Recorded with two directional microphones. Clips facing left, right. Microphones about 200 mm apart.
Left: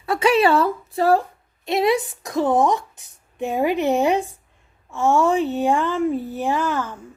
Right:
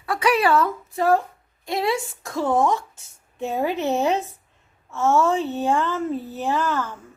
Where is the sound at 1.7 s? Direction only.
20° left (ahead or behind).